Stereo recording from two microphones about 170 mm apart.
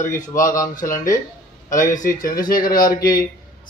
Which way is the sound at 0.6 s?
55° left (ahead or behind).